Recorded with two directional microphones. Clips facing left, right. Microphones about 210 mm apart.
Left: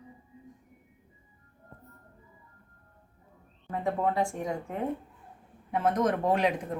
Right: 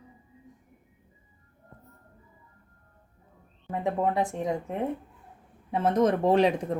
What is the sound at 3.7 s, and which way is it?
Speech, 20° right (ahead or behind).